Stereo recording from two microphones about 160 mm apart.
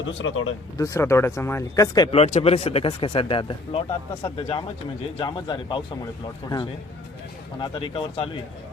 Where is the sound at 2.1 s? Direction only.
40° left (ahead or behind).